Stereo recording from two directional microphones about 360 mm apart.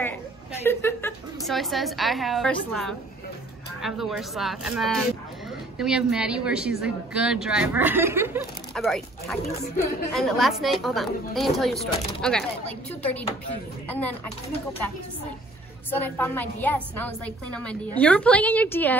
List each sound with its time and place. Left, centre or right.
0.7 s a woman's voice: centre
15.9 s a woman's voice: centre